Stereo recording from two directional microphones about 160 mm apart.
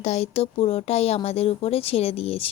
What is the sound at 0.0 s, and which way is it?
A woman's voice, 45° left (ahead or behind).